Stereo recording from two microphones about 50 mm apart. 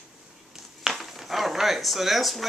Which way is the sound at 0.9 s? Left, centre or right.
Centre.